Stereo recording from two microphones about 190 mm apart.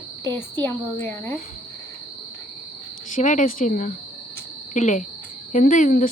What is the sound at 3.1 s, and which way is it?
Speech, 40° left (ahead or behind).